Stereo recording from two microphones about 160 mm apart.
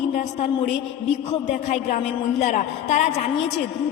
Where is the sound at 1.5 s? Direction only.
45° left (ahead or behind).